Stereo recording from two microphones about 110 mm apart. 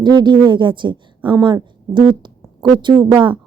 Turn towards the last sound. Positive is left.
turn(degrees=-45)  # may be behind; listen again after turning